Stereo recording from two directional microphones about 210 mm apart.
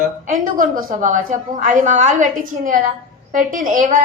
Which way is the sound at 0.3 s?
40° right (ahead or behind).